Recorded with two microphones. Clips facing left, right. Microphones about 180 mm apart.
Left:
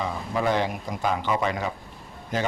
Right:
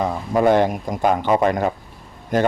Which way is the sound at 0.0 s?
50° right (ahead or behind).